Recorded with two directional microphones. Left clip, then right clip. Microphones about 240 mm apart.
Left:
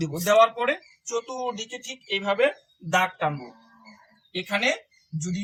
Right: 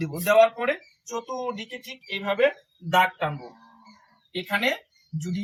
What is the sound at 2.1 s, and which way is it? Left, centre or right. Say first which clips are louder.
Speech: even; centre.